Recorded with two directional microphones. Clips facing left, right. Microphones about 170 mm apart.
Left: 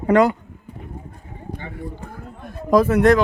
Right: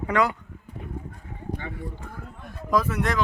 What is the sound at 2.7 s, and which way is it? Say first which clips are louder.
Speech: left 10 dB; 50° left (ahead or behind).